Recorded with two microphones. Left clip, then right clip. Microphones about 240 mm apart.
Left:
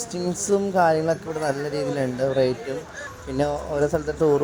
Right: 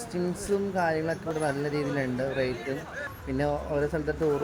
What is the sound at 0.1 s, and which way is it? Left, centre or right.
Speech, left.